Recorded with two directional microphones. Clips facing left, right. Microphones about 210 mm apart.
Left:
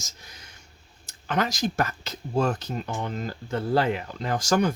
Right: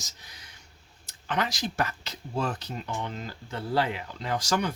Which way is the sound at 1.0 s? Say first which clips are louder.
Left 3 dB; 45° left (ahead or behind).